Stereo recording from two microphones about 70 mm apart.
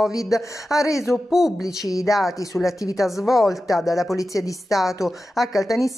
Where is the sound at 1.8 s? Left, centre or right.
Left.